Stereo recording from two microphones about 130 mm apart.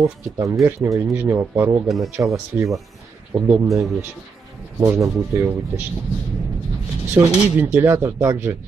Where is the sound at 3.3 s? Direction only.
20° right (ahead or behind).